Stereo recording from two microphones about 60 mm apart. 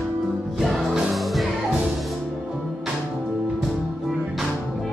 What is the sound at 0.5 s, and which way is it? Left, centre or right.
Music, centre.